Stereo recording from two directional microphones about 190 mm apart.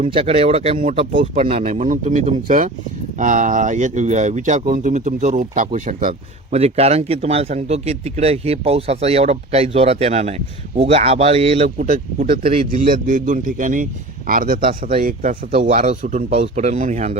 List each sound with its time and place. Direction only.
0.1 s speech: 30° right (ahead or behind); by 6.1 s 45° right (ahead or behind)
6.5 s speech: 35° right (ahead or behind)
11.8 s a man's voice: 45° right (ahead or behind)